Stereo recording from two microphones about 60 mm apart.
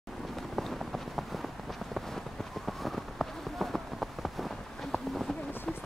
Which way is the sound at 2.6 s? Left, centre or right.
Centre.